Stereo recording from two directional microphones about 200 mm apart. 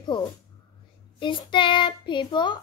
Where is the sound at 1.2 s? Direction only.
25° left (ahead or behind).